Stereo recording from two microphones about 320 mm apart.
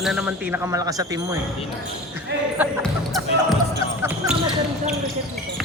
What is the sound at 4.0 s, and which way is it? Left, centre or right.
Basketball bounce, centre.